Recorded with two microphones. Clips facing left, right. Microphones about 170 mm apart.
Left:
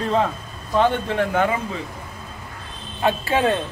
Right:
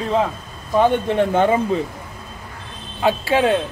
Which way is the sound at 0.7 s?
15° right (ahead or behind).